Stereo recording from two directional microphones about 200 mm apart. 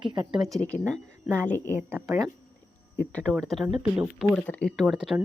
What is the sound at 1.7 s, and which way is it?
Speech, 10° right (ahead or behind).